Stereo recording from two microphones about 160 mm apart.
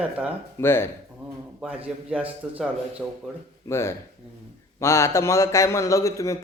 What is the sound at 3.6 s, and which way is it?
A man's voice, 15° left (ahead or behind).